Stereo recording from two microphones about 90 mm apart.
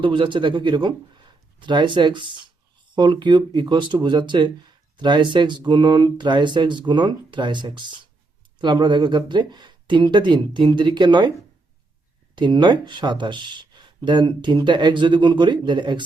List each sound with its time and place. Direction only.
0.0 s speech: 65° right (ahead or behind)
12.4 s speech: 55° right (ahead or behind)